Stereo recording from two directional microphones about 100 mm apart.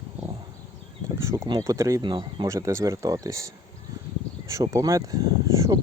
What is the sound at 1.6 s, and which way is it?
Speech, 30° right (ahead or behind).